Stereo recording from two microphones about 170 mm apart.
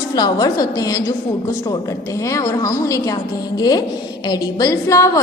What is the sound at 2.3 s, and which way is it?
A woman's voice, 20° left (ahead or behind).